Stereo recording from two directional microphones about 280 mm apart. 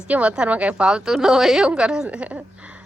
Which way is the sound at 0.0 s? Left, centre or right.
Centre.